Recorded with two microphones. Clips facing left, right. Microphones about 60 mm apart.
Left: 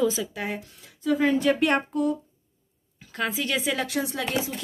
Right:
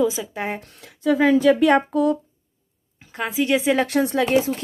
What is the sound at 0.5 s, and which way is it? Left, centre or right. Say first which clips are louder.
Speech: right 2 dB; right.